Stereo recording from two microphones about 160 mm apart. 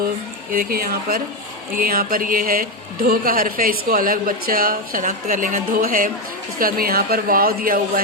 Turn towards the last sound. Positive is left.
turn(degrees=-65)  # may be behind; listen again after turning